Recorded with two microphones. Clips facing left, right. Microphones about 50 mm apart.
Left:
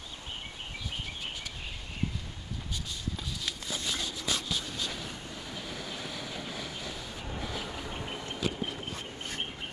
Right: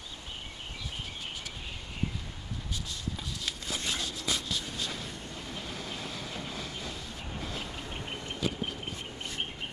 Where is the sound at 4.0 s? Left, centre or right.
Left.